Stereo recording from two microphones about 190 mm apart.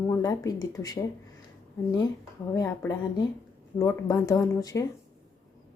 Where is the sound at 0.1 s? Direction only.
20° left (ahead or behind).